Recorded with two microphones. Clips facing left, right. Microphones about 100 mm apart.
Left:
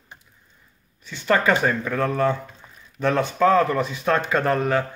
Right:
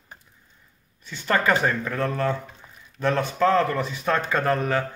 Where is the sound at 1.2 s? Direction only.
15° left (ahead or behind).